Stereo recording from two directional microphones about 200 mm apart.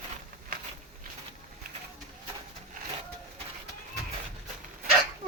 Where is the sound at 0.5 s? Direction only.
45° right (ahead or behind).